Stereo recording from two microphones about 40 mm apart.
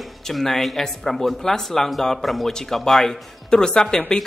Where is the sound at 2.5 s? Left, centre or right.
Centre.